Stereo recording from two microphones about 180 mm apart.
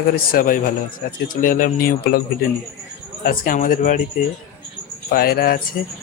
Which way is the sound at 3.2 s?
50° left (ahead or behind).